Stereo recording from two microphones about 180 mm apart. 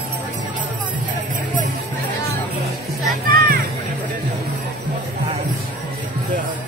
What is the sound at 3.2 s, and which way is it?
Music, 50° right (ahead or behind).